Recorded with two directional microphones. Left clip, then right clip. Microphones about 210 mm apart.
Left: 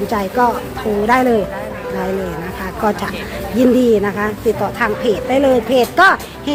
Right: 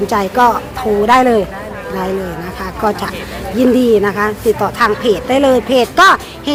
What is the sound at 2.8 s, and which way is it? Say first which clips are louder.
Speech: right 2 dB; 5° right (ahead or behind).